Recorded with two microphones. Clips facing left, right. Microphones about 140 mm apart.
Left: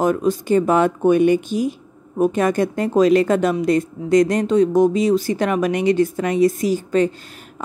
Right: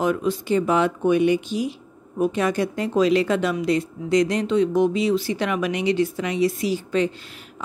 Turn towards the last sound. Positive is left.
turn(degrees=45)  # may be behind; listen again after turning